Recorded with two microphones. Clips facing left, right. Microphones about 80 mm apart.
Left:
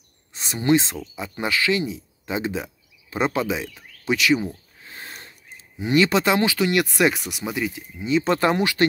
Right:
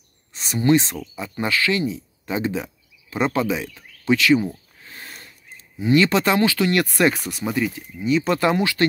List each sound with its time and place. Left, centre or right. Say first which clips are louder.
0.3 s speech: right 2 dB; left
4.8 s a sound: left 1 dB; left
5.8 s speech: right 2 dB; left
8.0 s speech: right 1 dB; left